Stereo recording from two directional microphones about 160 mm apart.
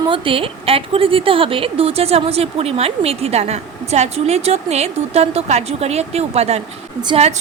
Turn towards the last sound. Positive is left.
turn(degrees=-40)  # may be behind; listen again after turning